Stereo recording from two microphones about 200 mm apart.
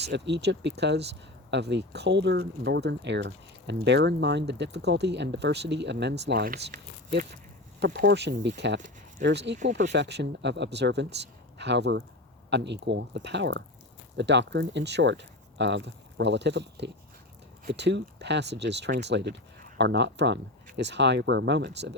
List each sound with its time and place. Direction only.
0.0 s speech: 60° right (ahead or behind)